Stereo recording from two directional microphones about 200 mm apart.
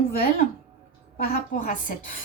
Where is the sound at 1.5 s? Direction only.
40° left (ahead or behind).